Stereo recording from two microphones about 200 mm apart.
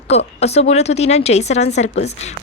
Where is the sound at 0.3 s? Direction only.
30° left (ahead or behind).